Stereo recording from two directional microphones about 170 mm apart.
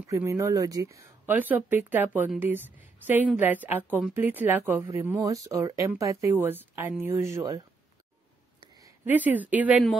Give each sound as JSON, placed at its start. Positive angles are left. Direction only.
{"t": 0.0, "sound": "a woman's voice", "side_deg": -20}
{"t": 8.8, "sound": "speech", "side_deg": -10}